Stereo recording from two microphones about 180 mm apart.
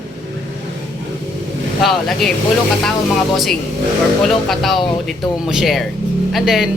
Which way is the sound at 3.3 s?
Centre (ahead or behind).